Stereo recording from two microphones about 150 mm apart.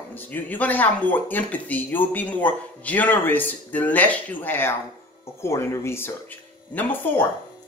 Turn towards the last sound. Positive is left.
turn(degrees=15)  # may be behind; listen again after turning